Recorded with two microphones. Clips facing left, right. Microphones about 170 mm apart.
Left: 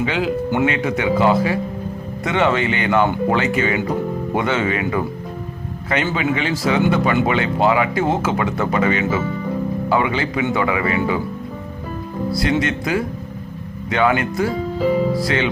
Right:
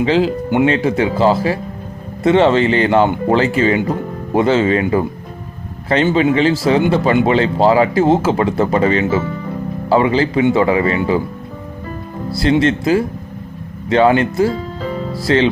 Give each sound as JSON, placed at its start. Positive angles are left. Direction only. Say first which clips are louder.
{"t": 0.0, "sound": "speech", "louder": "right 5 dB", "side_deg": -30}
{"t": 6.1, "sound": "speech", "louder": "right 7 dB", "side_deg": -30}
{"t": 12.3, "sound": "speech", "louder": "right 6 dB", "side_deg": -30}